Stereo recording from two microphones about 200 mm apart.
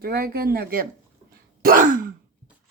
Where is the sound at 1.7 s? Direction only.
40° right (ahead or behind).